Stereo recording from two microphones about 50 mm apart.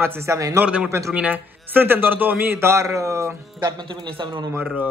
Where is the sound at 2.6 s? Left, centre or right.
Right.